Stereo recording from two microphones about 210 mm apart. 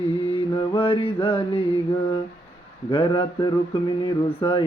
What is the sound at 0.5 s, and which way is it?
Mantra, 25° left (ahead or behind).